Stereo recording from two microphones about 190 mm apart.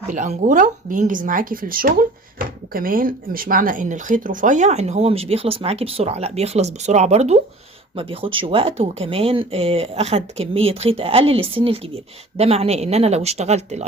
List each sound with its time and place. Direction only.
0.1 s speech: 40° right (ahead or behind)